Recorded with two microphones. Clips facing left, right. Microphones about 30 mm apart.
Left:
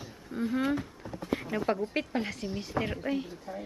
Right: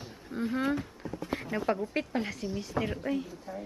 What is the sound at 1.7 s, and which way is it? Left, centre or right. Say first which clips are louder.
Speech: even; centre.